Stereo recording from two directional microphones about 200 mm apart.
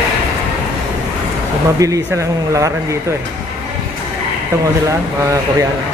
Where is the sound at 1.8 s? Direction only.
15° right (ahead or behind).